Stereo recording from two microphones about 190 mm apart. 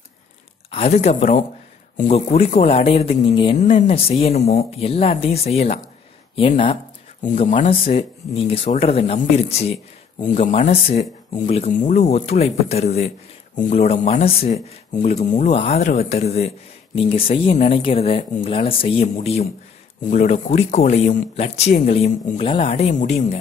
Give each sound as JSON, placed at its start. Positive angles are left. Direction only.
{"t": 0.7, "sound": "speech", "side_deg": 30}